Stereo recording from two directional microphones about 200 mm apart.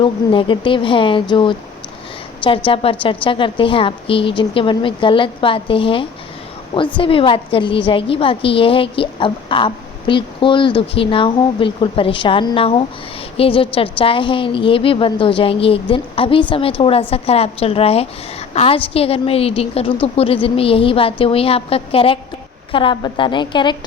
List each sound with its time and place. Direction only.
0.0 s a woman's voice: 25° left (ahead or behind)
2.6 s a woman's voice: 25° left (ahead or behind)